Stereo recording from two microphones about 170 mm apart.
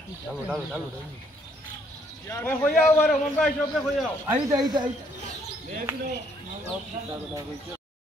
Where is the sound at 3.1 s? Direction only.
Centre (ahead or behind).